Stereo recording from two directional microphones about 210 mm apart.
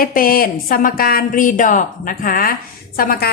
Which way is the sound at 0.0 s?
45° left (ahead or behind).